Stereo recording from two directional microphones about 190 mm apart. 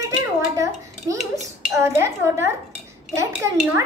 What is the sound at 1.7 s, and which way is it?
Chink, 15° right (ahead or behind).